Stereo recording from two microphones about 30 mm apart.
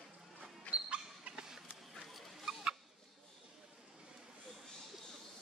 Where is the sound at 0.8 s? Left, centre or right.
Right.